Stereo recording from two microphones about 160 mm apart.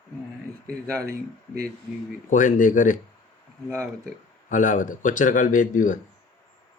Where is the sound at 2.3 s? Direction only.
55° left (ahead or behind).